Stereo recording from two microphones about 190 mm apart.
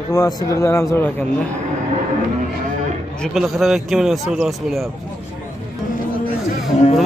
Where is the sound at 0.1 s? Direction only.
20° left (ahead or behind).